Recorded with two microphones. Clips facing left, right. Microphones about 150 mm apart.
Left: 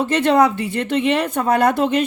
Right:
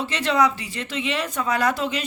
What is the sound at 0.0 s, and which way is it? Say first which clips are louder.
A woman's voice: left 6 dB; 55° left (ahead or behind).